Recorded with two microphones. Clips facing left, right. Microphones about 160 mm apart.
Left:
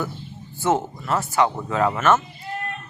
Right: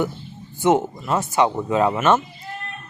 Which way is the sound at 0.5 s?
20° right (ahead or behind).